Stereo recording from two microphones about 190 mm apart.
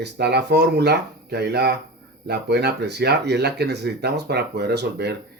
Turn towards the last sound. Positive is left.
turn(degrees=-60)  # may be behind; listen again after turning